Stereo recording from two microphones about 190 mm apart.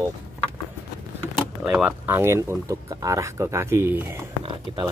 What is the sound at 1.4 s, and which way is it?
Speech, 5° right (ahead or behind).